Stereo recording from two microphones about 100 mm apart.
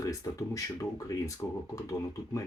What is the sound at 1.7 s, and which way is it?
Speech, 35° left (ahead or behind).